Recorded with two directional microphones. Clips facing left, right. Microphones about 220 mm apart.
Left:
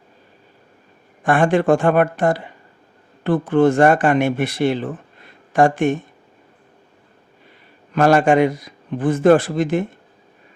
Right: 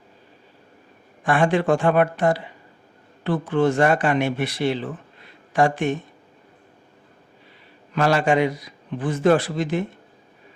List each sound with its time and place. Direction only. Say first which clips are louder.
1.2 s speech: left 4 dB; 50° left (ahead or behind)
7.9 s speech: left 5 dB; 50° left (ahead or behind)